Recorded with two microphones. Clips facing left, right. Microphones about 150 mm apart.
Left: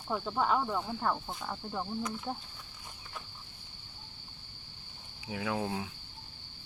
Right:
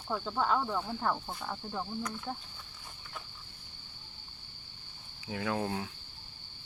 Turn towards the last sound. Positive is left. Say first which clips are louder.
# right 1 dB
turn(degrees=5)  # may be behind; listen again after turning